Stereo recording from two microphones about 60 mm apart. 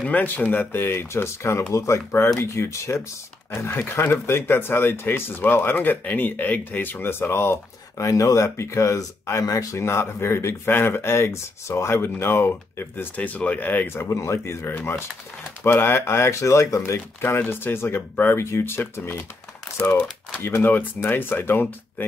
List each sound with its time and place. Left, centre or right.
0.0 s speech: left
1.6 s speech: left
3.6 s speech: left
8.0 s speech: left
9.8 s speech: left
13.1 s speech: left
14.0 s speech: left
19.8 s speech: left
20.4 s speech: left